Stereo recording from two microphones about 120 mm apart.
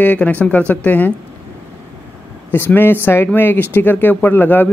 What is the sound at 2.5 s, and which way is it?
Speech, 15° left (ahead or behind).